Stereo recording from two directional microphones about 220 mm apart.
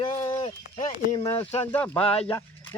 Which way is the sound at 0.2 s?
10° left (ahead or behind).